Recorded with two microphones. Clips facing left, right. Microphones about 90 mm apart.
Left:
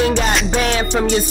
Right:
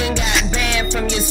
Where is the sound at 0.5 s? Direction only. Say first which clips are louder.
Left 4 dB; 45° left (ahead or behind).